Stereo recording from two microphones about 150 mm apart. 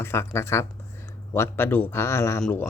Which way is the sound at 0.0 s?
15° left (ahead or behind).